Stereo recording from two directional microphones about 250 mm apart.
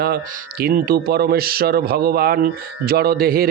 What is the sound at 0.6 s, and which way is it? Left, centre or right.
Speech, right.